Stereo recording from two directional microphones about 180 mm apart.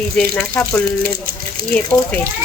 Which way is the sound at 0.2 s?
10° left (ahead or behind).